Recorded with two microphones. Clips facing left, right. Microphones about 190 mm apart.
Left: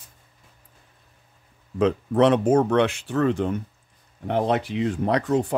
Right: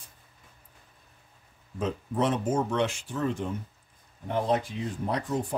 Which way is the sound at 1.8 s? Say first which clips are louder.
Left 9 dB; 75° left (ahead or behind).